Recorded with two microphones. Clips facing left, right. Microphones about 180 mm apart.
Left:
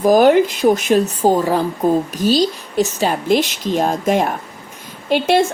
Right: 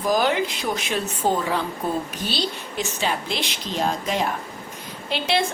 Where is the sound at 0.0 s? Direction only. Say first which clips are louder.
Left 10 dB; 45° left (ahead or behind).